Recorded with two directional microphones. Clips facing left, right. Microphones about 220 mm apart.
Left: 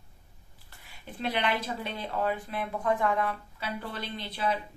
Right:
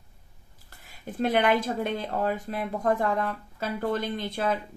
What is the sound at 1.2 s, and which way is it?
Speech, 50° right (ahead or behind).